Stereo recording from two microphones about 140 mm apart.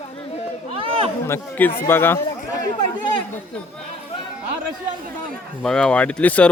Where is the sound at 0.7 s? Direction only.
40° right (ahead or behind).